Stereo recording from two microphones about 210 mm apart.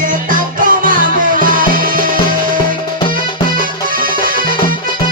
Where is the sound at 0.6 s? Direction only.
40° right (ahead or behind).